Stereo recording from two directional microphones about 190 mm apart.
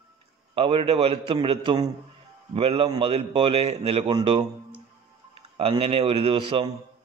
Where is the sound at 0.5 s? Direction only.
30° right (ahead or behind).